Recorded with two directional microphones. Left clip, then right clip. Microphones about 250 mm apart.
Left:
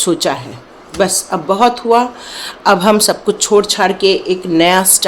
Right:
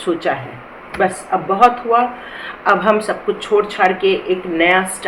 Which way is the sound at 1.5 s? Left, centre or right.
Left.